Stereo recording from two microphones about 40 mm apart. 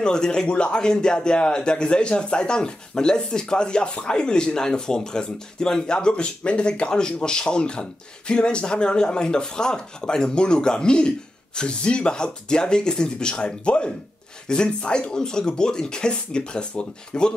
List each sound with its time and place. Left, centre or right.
0.0 s speech: centre